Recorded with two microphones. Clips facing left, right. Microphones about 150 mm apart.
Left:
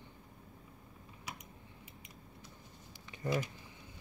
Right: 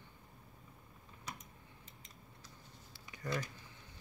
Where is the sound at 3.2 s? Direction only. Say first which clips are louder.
Left 5 dB; 20° left (ahead or behind).